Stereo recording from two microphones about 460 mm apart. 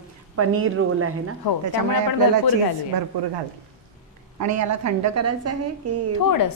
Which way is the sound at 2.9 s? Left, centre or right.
Right.